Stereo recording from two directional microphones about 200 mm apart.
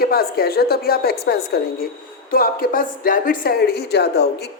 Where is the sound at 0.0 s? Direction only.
50° left (ahead or behind).